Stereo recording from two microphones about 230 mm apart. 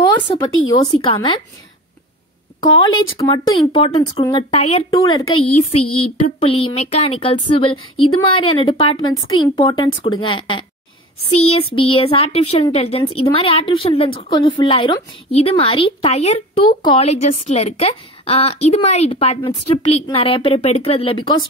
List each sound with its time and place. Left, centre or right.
0.0 s a sound: left
1.0 s a woman's voice: left
3.2 s a woman's voice: centre
5.2 s a woman's voice: left
5.8 s a sound: left
6.2 s a woman's voice: left